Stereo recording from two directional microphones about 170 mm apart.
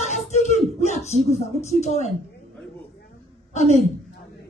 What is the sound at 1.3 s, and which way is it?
Speech, 40° left (ahead or behind).